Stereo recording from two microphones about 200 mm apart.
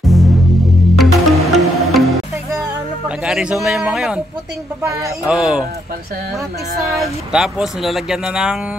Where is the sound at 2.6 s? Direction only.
Centre (ahead or behind).